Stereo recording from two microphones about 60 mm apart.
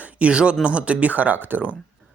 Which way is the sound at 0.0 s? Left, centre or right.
Right.